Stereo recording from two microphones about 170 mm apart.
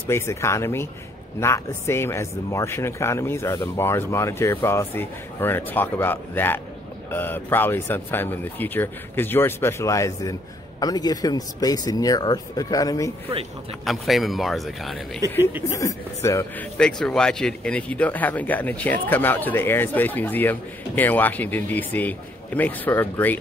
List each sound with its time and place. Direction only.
0.1 s speech: 15° left (ahead or behind)
13.8 s speech: centre (ahead or behind)
15.2 s speech: 10° right (ahead or behind)
15.7 s speech: 20° left (ahead or behind)
16.7 s speech: 5° left (ahead or behind)